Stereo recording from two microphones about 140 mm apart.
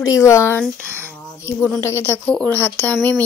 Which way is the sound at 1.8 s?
20° left (ahead or behind).